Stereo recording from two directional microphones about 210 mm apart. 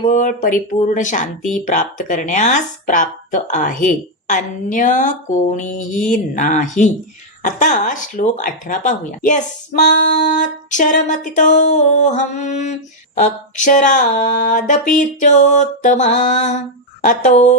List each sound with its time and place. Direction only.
0.1 s speech: 40° left (ahead or behind)